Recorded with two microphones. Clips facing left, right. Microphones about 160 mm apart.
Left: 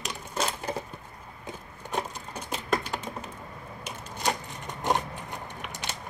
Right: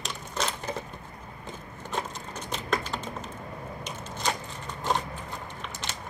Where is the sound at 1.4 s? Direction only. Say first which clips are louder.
Left 1 dB; 15° left (ahead or behind).